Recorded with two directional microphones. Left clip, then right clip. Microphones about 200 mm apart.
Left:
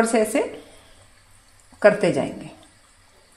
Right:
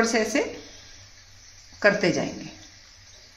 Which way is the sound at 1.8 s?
35° left (ahead or behind).